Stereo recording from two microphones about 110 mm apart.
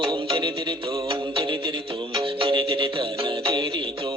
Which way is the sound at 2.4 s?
45° right (ahead or behind).